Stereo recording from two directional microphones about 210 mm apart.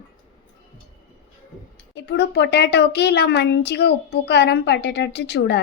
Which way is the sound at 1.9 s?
55° left (ahead or behind).